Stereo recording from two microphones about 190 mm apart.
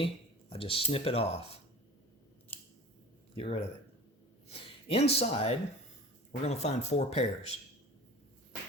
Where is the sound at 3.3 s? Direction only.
30° left (ahead or behind).